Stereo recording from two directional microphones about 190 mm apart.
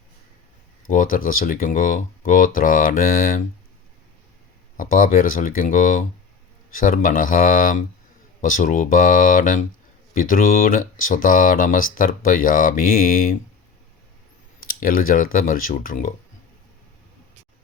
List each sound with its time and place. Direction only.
0.9 s speech: 45° left (ahead or behind)
4.8 s speech: 45° left (ahead or behind)
14.6 s speech: 50° left (ahead or behind)